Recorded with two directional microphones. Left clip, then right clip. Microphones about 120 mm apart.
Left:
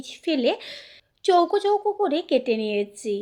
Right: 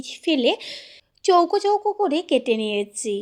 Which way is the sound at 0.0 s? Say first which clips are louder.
Right 3 dB; 30° right (ahead or behind).